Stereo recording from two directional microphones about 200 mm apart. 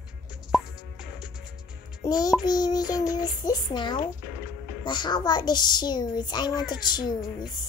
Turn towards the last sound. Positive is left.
turn(degrees=20)  # may be behind; listen again after turning